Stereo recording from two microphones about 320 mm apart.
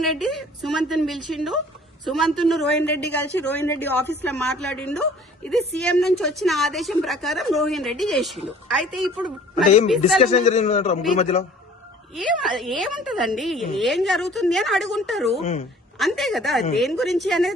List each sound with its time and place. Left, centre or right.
0.0 s a woman's voice: centre
9.6 s a man's voice: left
12.1 s a woman's voice: centre
15.4 s a man's voice: left
16.0 s a woman's voice: centre